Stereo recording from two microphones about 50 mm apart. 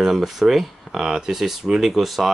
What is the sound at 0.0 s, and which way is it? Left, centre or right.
Speech, centre.